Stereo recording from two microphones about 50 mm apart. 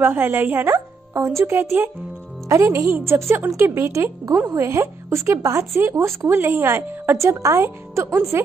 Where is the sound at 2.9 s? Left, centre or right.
Right.